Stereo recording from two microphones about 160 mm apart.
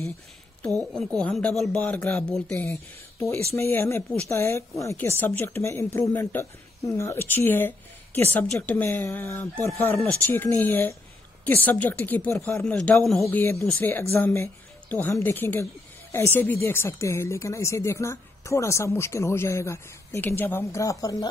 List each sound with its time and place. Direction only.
0.7 s a woman's voice: 5° left (ahead or behind); by 21.3 s 20° left (ahead or behind)